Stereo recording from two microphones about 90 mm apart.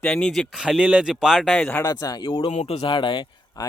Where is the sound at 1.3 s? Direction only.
5° left (ahead or behind).